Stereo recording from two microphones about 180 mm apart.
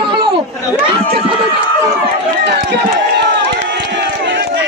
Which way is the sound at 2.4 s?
70° right (ahead or behind).